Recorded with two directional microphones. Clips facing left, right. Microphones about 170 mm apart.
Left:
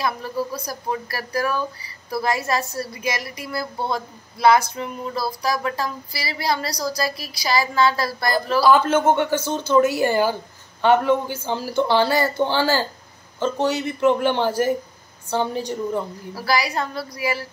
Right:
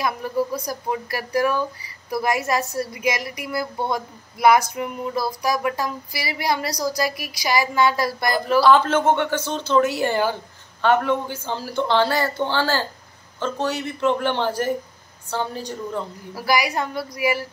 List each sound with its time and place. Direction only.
0.0 s speech: 15° right (ahead or behind)
8.6 s a man's voice: 5° left (ahead or behind)
16.3 s speech: 15° right (ahead or behind)